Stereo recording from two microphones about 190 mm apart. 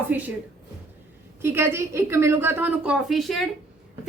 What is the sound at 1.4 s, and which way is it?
A woman's voice, 10° right (ahead or behind).